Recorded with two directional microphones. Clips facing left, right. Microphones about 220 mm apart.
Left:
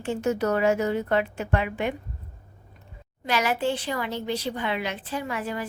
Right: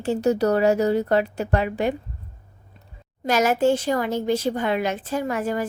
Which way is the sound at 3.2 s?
45° right (ahead or behind).